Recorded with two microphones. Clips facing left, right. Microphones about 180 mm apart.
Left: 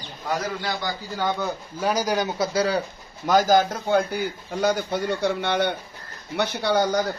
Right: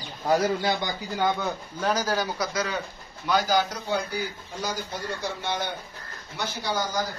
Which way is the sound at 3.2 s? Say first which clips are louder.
Left 5 dB; 45° left (ahead or behind).